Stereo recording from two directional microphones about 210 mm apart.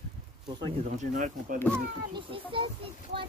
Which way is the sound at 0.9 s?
40° right (ahead or behind).